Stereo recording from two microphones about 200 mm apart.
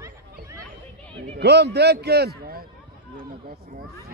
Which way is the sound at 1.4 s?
55° right (ahead or behind).